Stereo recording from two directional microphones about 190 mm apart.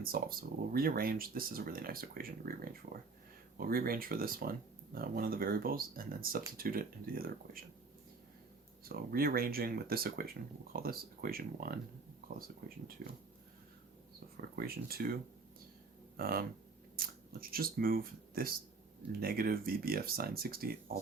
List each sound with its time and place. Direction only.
0.0 s speech: 50° right (ahead or behind)
3.6 s speech: 50° right (ahead or behind)
8.8 s speech: 50° right (ahead or behind)
13.0 s speech: 50° right (ahead or behind)
14.5 s speech: 55° right (ahead or behind)
17.5 s speech: 50° right (ahead or behind)